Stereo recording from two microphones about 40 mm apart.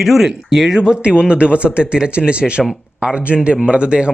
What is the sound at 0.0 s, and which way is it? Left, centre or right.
Speech, centre.